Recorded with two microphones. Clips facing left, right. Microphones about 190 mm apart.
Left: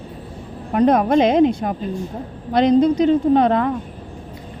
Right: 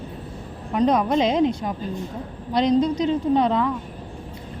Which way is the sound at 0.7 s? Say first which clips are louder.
Left 4 dB; 55° left (ahead or behind).